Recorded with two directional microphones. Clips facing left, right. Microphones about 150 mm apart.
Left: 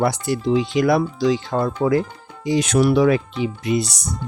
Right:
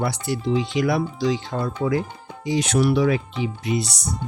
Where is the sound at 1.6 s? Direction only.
55° left (ahead or behind).